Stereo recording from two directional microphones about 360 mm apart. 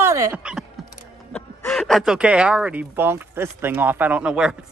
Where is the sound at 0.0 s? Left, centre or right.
Centre.